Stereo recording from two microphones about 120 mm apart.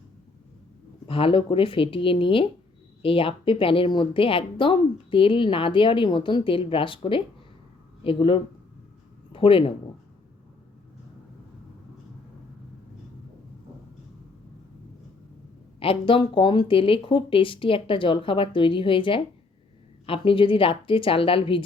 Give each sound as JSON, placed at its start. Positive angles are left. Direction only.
{"t": 1.0, "sound": "a woman's voice", "side_deg": 50}
{"t": 15.8, "sound": "a woman's voice", "side_deg": 50}